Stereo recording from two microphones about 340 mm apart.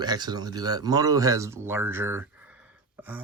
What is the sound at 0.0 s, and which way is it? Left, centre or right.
Speech, centre.